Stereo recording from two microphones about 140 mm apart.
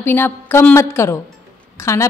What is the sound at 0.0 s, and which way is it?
A woman's voice, 15° left (ahead or behind).